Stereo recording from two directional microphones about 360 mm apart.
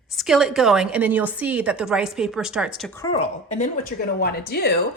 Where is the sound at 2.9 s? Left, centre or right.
Centre.